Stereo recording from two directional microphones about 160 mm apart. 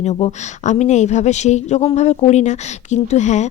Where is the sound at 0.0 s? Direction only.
45° left (ahead or behind).